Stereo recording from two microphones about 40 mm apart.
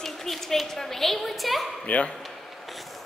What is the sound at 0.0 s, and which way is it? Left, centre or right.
A woman's voice, centre.